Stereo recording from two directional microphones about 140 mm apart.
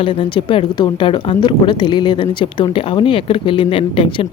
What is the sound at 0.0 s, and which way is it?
A woman's voice, 40° left (ahead or behind).